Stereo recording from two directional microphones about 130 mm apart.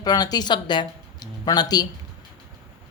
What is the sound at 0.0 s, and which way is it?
Speech, 30° left (ahead or behind).